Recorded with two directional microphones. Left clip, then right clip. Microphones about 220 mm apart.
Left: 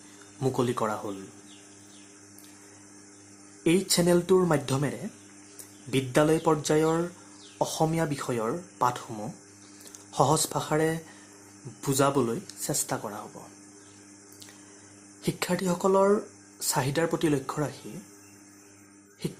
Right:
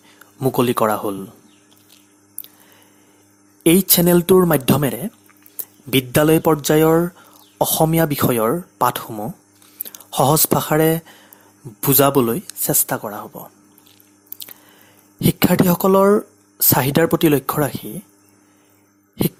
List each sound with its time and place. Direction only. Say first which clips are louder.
0.3 s speech: right 10 dB; 35° right (ahead or behind)
3.6 s speech: right 9 dB; 40° right (ahead or behind)
15.2 s speech: right 13 dB; 40° right (ahead or behind)